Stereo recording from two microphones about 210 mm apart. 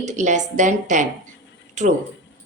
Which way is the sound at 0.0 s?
35° right (ahead or behind).